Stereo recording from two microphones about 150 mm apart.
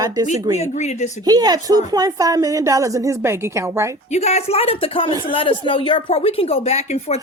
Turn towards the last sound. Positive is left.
turn(degrees=45)  # may be behind; listen again after turning